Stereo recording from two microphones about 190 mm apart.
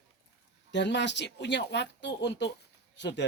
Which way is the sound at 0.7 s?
70° left (ahead or behind).